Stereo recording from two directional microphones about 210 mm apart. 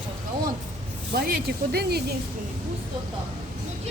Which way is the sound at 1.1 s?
50° right (ahead or behind).